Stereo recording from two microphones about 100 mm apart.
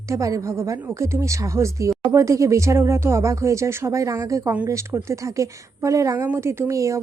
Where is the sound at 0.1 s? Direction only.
35° right (ahead or behind).